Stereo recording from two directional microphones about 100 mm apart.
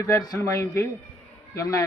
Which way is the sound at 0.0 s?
35° left (ahead or behind).